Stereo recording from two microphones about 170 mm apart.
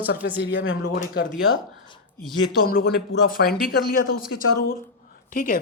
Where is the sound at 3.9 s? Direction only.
55° left (ahead or behind).